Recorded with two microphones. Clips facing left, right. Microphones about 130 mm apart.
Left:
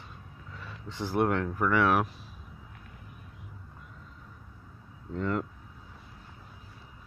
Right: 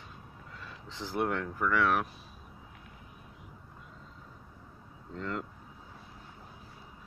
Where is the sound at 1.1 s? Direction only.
5° left (ahead or behind).